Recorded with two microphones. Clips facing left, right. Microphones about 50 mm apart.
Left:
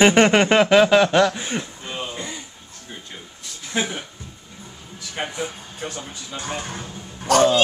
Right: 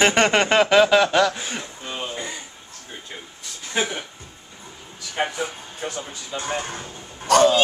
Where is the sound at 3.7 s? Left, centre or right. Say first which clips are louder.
Even; centre.